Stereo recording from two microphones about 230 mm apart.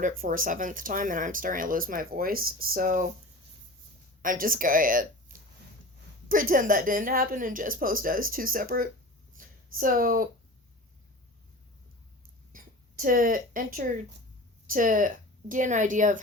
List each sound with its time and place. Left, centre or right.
0.0 s speech: right
4.2 s speech: right
12.5 s speech: right